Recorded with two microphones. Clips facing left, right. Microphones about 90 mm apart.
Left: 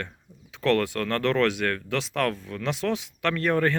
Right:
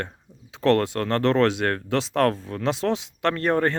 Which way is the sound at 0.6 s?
35° right (ahead or behind).